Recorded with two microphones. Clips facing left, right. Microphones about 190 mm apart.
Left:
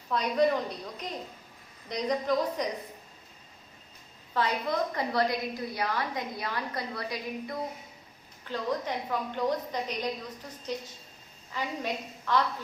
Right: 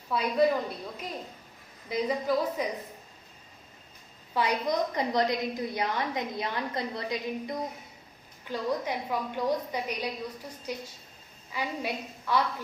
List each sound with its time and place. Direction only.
0.1 s a woman's voice: 5° right (ahead or behind)
4.4 s a woman's voice: 15° right (ahead or behind)
8.4 s a woman's voice: 10° right (ahead or behind)